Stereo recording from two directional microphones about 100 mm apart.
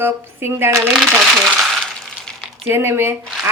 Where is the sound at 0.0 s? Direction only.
25° right (ahead or behind).